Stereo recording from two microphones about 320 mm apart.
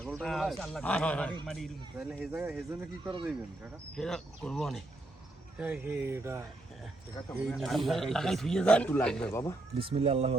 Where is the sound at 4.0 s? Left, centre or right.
Centre.